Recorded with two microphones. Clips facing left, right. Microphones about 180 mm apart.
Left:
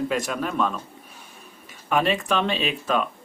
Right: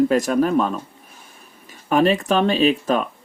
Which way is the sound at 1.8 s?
40° right (ahead or behind).